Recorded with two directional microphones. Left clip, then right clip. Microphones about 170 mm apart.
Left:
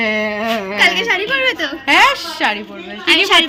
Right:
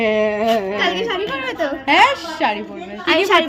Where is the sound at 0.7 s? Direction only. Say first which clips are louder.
Left 6 dB; 25° right (ahead or behind).